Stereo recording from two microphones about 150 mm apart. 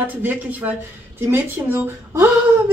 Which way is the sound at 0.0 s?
10° right (ahead or behind).